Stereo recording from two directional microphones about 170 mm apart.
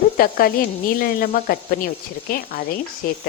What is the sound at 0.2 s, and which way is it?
Speech, 60° left (ahead or behind).